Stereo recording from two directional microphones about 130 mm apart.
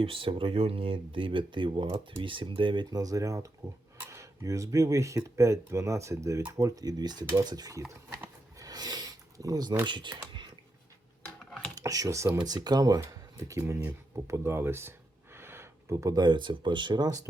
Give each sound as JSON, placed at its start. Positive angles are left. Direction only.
{"t": 0.0, "sound": "speech", "side_deg": -45}
{"t": 8.5, "sound": "a sound", "side_deg": -30}
{"t": 9.8, "sound": "speech", "side_deg": -35}
{"t": 11.7, "sound": "speech", "side_deg": -25}